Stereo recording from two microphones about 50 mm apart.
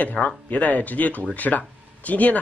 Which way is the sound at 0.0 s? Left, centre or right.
Left.